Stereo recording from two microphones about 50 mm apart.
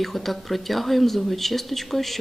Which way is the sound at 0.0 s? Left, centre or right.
Centre.